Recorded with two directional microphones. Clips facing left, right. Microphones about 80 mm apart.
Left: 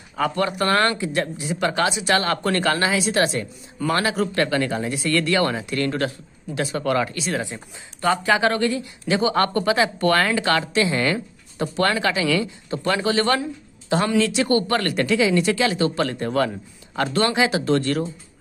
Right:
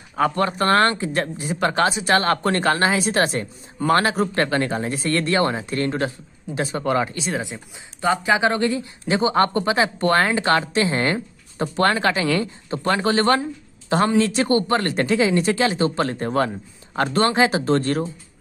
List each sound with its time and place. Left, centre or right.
0.1 s speech: right
14.7 s speech: right